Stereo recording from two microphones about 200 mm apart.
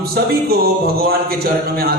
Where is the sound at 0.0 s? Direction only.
50° right (ahead or behind).